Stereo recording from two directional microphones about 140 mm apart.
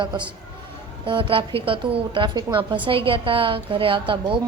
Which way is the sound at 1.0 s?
40° right (ahead or behind).